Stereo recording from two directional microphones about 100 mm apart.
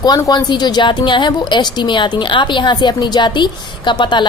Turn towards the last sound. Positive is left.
turn(degrees=50)  # may be behind; listen again after turning